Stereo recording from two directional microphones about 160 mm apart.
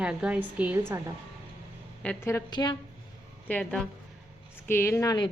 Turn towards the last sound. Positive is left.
turn(degrees=20)  # may be behind; listen again after turning